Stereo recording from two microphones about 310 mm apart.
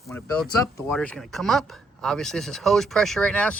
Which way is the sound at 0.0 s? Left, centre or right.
Centre.